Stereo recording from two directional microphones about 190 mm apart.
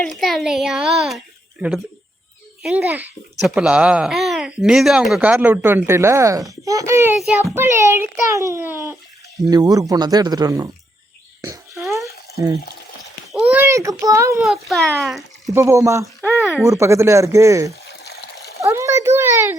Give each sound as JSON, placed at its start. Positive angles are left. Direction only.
{"t": 0.0, "sound": "speech", "side_deg": 0}
{"t": 2.6, "sound": "a child's voice", "side_deg": -10}
{"t": 7.2, "sound": "a child's voice", "side_deg": -5}
{"t": 11.4, "sound": "wail", "side_deg": -15}
{"t": 13.3, "sound": "a child's voice", "side_deg": -10}
{"t": 14.3, "sound": "speech", "side_deg": 0}
{"t": 15.4, "sound": "a child's voice", "side_deg": -15}
{"t": 17.8, "sound": "water", "side_deg": 55}
{"t": 18.6, "sound": "a child's voice", "side_deg": -15}